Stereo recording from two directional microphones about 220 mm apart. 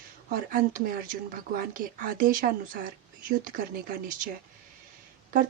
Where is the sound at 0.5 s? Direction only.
40° right (ahead or behind).